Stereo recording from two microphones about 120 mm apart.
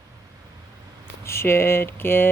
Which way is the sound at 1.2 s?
20° left (ahead or behind).